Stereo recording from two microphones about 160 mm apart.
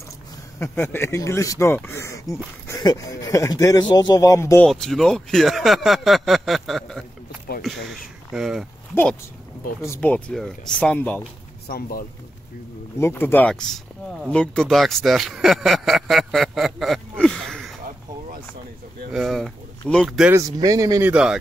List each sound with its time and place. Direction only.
0.6 s speech: 15° left (ahead or behind)
4.6 s speech: 5° left (ahead or behind)
9.8 s speech: 15° left (ahead or behind)
11.6 s speech: 70° left (ahead or behind)
13.0 s speech: 15° left (ahead or behind)
19.1 s speech: centre (ahead or behind)
20.3 s speech: 20° right (ahead or behind)
21.1 s speech: 5° right (ahead or behind)